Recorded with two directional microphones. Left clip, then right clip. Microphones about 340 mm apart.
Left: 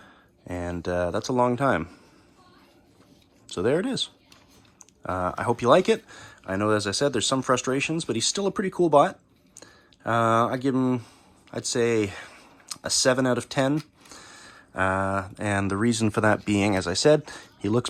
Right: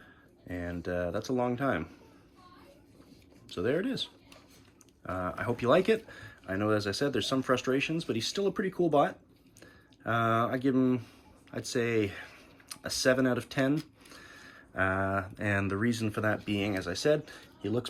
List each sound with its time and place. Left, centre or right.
0.0 s speech: centre
3.5 s speech: centre